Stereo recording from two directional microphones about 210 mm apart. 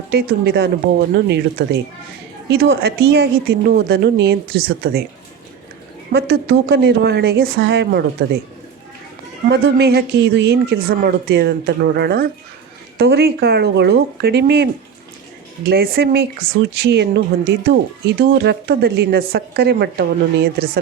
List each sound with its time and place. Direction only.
0.1 s speech: 50° right (ahead or behind)
6.1 s speech: 50° right (ahead or behind)
9.5 s speech: 50° right (ahead or behind)
15.7 s speech: 45° right (ahead or behind)